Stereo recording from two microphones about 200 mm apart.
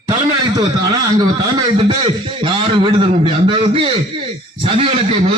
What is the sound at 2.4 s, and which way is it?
A man's voice, 25° right (ahead or behind).